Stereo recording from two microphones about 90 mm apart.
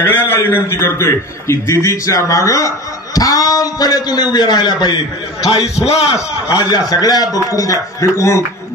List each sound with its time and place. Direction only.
0.0 s a man's voice: 25° left (ahead or behind); by 5.0 s 55° left (ahead or behind)
5.6 s a man's voice: 5° right (ahead or behind)
6.5 s a man's voice: 45° left (ahead or behind)